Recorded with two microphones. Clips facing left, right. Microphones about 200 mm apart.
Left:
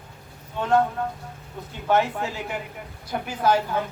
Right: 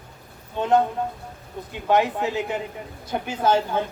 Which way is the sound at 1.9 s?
15° right (ahead or behind).